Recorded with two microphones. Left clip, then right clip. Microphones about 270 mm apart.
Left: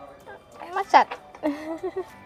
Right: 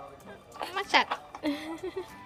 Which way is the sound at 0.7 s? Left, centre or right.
Centre.